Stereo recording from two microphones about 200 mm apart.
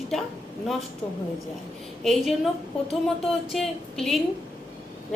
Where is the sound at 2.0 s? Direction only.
Centre (ahead or behind).